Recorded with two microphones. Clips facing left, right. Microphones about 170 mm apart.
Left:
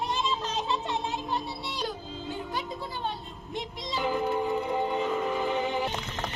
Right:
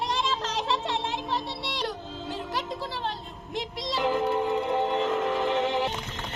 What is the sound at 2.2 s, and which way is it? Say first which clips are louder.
Music: right 1 dB; 85° right.